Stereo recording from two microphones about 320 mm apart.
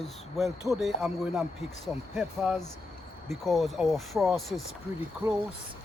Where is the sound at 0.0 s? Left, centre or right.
Centre.